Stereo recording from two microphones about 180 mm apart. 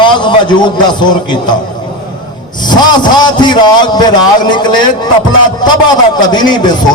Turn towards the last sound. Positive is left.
turn(degrees=25)  # may be behind; listen again after turning